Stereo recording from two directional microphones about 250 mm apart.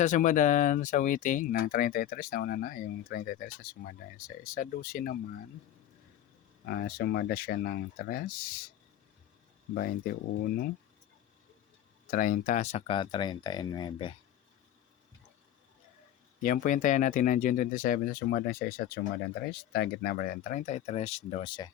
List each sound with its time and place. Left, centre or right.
0.0 s speech: left
6.7 s speech: left
9.7 s speech: left
12.1 s speech: left
16.4 s speech: left